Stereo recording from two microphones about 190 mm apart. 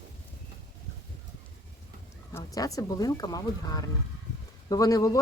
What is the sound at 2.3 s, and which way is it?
Speech, 20° left (ahead or behind).